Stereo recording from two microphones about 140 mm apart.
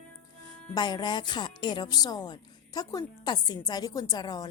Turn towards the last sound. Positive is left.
turn(degrees=30)  # may be behind; listen again after turning